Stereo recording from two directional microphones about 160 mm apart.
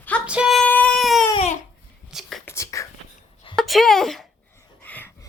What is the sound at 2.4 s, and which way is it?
Whispering, 20° left (ahead or behind).